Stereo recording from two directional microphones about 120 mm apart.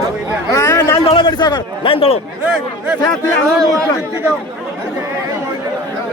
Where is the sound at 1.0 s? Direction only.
40° left (ahead or behind).